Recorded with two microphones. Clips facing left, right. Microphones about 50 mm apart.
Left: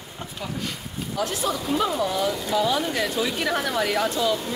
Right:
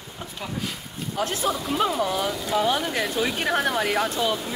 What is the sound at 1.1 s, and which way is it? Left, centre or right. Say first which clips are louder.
Speech: right 1 dB; right.